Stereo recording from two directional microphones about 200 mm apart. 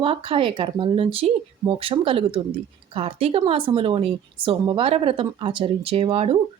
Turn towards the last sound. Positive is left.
turn(degrees=-30)  # may be behind; listen again after turning